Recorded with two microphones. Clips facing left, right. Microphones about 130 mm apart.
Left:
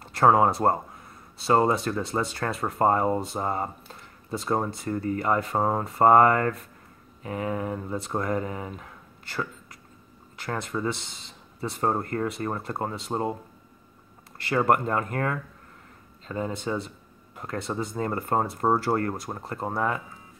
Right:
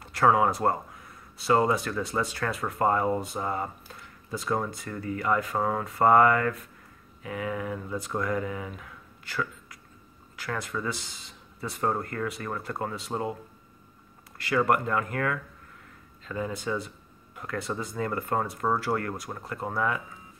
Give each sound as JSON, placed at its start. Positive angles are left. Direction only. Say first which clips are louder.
{"t": 0.0, "sound": "speech", "louder": "left 3 dB", "side_deg": 30}
{"t": 14.4, "sound": "speech", "louder": "left 2 dB", "side_deg": 30}